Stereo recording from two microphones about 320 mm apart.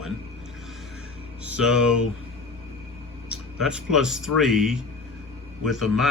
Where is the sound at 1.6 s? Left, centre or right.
Centre.